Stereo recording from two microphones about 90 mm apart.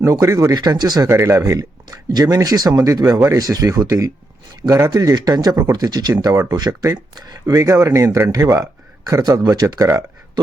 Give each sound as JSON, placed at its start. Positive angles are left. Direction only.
{"t": 0.0, "sound": "speech", "side_deg": -35}
{"t": 0.5, "sound": "speech", "side_deg": -50}
{"t": 1.0, "sound": "speech", "side_deg": -30}
{"t": 2.0, "sound": "speech", "side_deg": -45}
{"t": 4.9, "sound": "speech", "side_deg": -50}